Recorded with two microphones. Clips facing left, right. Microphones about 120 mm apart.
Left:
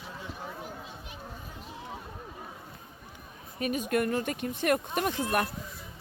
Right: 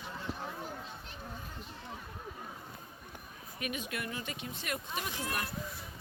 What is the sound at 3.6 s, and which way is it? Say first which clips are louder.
Speech: left 11 dB; 40° left (ahead or behind).